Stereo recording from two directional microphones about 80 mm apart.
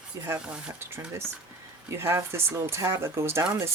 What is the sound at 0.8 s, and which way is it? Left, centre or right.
Speech, right.